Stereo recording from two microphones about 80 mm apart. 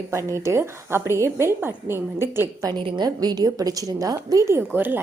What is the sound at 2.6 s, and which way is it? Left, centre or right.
A woman's voice, right.